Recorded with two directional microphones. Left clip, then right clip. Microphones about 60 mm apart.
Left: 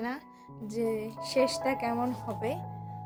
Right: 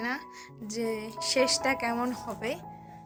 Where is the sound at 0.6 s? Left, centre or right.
Left.